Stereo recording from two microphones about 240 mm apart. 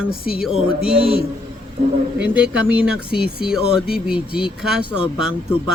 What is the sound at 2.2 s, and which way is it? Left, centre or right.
A man's voice, centre.